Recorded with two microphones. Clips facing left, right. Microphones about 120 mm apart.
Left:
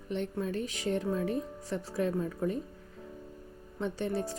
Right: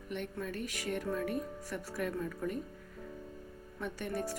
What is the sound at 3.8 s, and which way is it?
Speech, 30° left (ahead or behind).